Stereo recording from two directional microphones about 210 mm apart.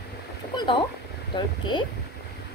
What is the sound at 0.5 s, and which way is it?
Speech, 25° left (ahead or behind).